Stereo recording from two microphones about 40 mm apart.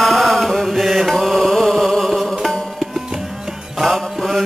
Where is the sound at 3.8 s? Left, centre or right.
Centre.